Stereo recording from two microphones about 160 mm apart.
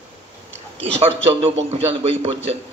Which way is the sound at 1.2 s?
40° right (ahead or behind).